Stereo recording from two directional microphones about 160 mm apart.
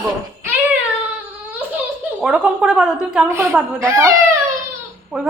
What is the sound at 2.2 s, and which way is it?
A woman's voice, 5° right (ahead or behind).